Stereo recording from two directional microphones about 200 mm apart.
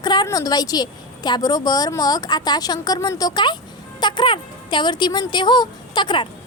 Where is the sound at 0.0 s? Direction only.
20° left (ahead or behind).